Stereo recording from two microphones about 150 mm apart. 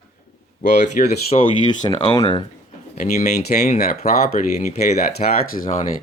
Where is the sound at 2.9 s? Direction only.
55° left (ahead or behind).